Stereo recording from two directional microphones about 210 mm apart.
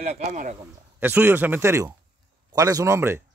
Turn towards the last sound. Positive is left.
turn(degrees=-10)  # may be behind; listen again after turning